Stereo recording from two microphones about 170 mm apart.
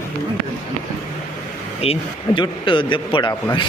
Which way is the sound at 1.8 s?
35° left (ahead or behind).